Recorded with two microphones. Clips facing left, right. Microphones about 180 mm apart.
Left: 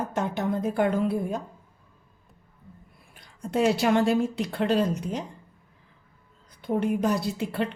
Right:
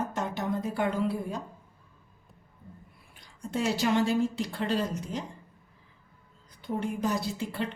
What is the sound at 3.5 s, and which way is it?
Speech, 60° left (ahead or behind).